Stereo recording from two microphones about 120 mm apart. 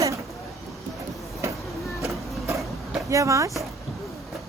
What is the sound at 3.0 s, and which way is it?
Speech, 25° right (ahead or behind).